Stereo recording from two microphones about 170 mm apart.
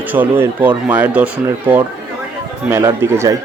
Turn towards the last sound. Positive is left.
turn(degrees=-15)  # may be behind; listen again after turning